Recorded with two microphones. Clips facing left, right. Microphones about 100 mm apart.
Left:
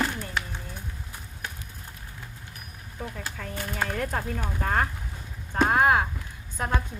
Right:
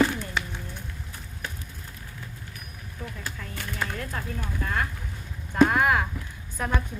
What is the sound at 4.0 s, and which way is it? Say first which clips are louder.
Speech: left 4 dB; 75° left (ahead or behind).